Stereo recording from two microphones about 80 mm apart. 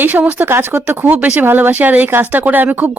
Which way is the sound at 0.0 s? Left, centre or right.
Right.